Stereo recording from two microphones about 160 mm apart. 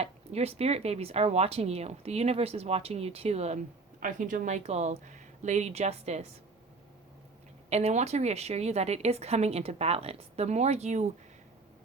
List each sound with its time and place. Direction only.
0.0 s speech: 40° right (ahead or behind)
4.0 s speech: 55° right (ahead or behind)
7.7 s speech: 40° right (ahead or behind)